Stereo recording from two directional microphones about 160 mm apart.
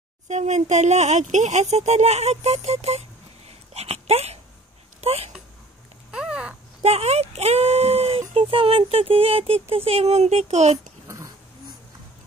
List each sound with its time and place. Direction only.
0.3 s speech: 45° right (ahead or behind)
6.1 s a sound: 5° right (ahead or behind)
6.8 s speech: 40° right (ahead or behind)
11.1 s dog: 20° right (ahead or behind)